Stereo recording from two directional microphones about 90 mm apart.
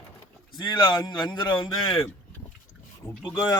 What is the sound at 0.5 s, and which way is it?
A man's voice, 60° left (ahead or behind).